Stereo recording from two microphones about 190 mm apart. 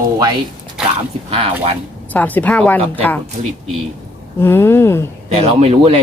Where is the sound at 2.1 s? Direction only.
10° left (ahead or behind).